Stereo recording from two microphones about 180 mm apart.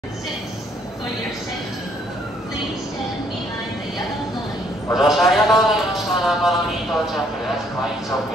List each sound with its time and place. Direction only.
4.9 s a man's voice: centre (ahead or behind)